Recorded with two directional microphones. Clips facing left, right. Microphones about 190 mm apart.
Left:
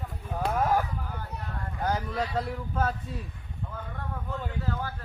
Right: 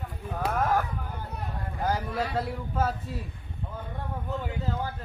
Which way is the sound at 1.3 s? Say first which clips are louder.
Right 2 dB; 55° right (ahead or behind).